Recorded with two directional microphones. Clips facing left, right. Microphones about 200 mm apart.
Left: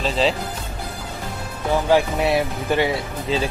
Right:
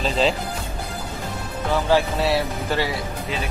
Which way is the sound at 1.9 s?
20° left (ahead or behind).